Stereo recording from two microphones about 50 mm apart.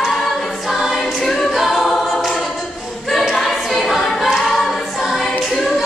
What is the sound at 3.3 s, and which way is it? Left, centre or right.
Choir, centre.